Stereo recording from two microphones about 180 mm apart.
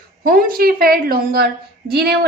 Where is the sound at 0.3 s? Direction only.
55° right (ahead or behind).